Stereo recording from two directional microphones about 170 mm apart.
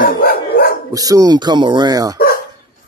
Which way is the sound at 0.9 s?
20° right (ahead or behind).